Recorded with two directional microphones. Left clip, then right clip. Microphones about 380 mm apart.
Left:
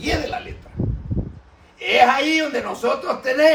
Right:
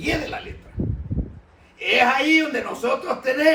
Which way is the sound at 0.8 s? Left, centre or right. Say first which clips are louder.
Left 1 dB; right.